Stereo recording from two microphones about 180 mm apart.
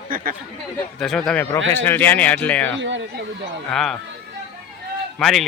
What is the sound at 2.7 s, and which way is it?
Speech, 90° right.